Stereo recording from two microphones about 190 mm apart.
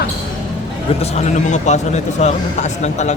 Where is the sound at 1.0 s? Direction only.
35° left (ahead or behind).